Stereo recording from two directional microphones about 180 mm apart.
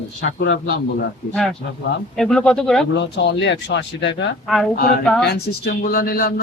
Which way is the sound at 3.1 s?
75° left (ahead or behind).